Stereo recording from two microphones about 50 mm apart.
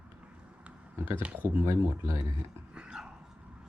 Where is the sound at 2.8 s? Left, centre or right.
Centre.